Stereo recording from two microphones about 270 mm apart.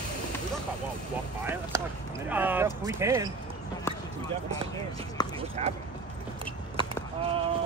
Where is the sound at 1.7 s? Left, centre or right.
Centre.